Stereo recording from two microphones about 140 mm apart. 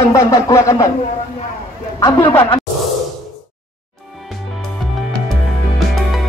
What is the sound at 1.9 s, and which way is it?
Speech, 30° left (ahead or behind).